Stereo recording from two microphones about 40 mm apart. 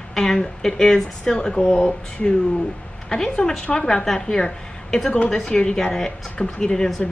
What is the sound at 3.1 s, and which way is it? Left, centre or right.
A woman's voice, centre.